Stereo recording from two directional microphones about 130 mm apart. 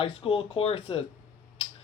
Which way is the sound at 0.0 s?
45° left (ahead or behind).